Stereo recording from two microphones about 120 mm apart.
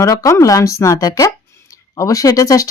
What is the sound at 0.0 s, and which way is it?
Speech, 25° left (ahead or behind).